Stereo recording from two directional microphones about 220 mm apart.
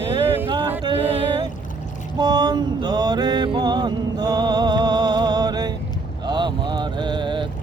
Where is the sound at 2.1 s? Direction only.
20° right (ahead or behind).